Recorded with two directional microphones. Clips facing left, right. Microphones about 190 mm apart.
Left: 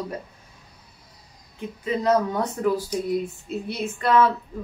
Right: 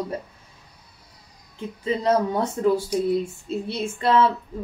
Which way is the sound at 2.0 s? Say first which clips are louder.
Even; 30° right (ahead or behind).